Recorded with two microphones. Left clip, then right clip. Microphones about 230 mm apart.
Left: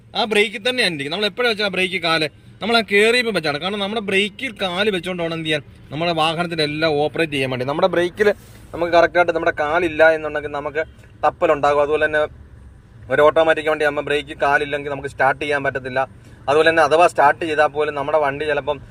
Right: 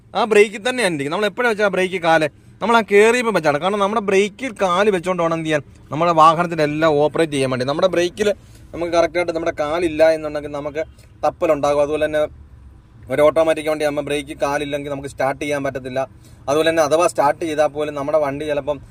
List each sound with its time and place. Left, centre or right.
0.1 s a man's voice: centre